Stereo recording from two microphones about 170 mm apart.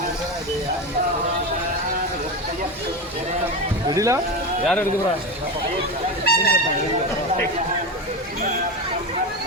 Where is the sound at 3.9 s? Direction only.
20° right (ahead or behind).